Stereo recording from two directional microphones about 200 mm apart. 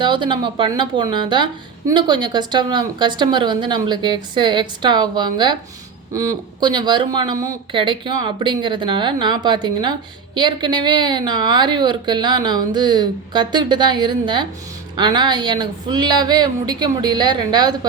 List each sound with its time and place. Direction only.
0.0 s a woman's voice: 25° right (ahead or behind)